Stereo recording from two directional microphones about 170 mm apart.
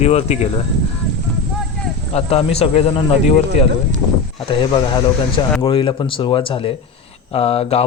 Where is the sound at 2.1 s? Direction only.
35° left (ahead or behind).